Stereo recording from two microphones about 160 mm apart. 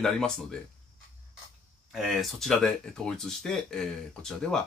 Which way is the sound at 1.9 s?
Centre (ahead or behind).